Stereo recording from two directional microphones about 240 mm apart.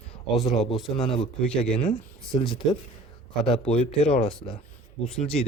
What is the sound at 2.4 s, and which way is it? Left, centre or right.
Speech, left.